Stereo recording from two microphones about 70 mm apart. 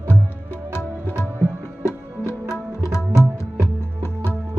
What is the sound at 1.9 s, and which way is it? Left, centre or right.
Music, left.